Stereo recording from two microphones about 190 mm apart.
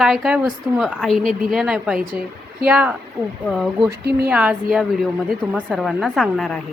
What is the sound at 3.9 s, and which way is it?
Speech, 60° right (ahead or behind).